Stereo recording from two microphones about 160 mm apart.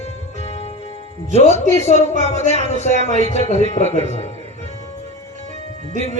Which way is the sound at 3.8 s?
40° left (ahead or behind).